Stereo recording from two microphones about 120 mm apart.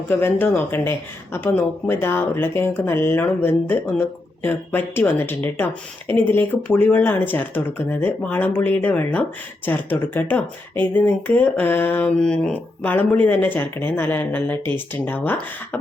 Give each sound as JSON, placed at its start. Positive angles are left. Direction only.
{"t": 0.1, "sound": "speech", "side_deg": 20}